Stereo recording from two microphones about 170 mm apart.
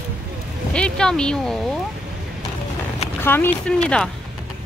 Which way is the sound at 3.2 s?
10° left (ahead or behind).